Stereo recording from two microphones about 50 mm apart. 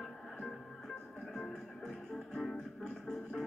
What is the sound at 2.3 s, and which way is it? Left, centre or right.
Music, centre.